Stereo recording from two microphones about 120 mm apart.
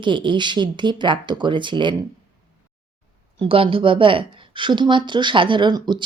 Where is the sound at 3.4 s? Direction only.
50° right (ahead or behind).